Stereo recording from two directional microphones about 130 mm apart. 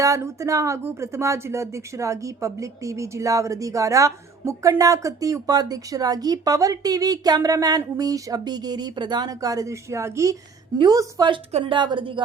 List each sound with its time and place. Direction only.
0.0 s speech: 25° right (ahead or behind); by 12.2 s 40° right (ahead or behind)